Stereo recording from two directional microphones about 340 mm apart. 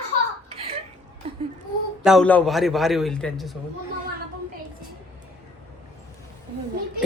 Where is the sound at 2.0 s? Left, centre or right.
Centre.